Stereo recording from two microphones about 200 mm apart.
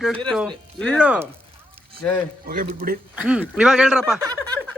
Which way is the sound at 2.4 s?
45° right (ahead or behind).